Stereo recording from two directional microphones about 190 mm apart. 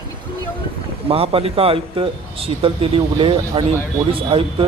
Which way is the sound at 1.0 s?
30° right (ahead or behind).